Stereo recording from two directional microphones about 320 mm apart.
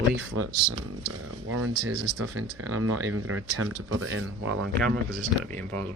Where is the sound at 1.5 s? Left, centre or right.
Right.